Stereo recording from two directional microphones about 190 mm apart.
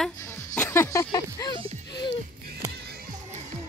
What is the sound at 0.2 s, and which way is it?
Music, 15° left (ahead or behind).